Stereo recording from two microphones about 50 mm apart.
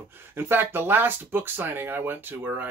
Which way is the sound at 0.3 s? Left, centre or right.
Right.